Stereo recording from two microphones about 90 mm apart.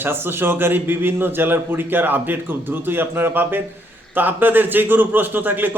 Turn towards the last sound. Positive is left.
turn(degrees=-20)  # may be behind; listen again after turning